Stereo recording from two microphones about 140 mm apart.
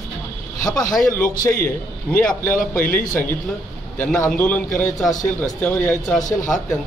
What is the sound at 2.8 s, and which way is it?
Speech, 75° left (ahead or behind).